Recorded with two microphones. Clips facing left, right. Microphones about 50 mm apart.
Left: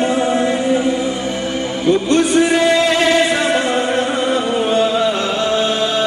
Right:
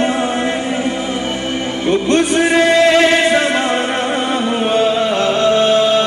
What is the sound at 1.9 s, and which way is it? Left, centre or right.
A man's voice, right.